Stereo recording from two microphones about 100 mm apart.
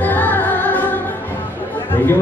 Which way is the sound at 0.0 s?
20° left (ahead or behind).